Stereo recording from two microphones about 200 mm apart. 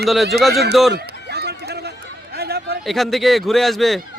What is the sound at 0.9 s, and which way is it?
Run, 55° right (ahead or behind).